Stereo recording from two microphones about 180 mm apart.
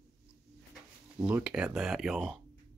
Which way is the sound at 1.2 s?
5° right (ahead or behind).